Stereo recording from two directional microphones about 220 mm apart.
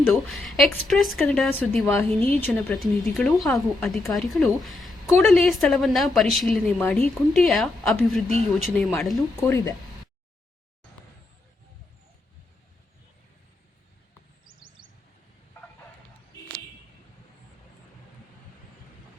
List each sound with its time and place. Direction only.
0.0 s a woman's voice: centre (ahead or behind)
14.4 s chirp: 20° right (ahead or behind)